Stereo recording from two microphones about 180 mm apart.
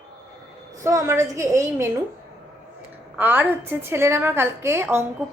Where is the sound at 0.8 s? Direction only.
15° right (ahead or behind).